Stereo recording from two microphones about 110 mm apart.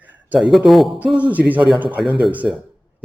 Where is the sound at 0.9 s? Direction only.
10° right (ahead or behind).